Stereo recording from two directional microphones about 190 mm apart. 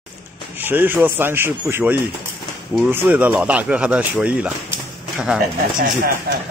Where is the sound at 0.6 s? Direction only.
10° right (ahead or behind).